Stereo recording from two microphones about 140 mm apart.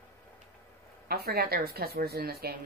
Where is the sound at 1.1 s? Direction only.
90° right.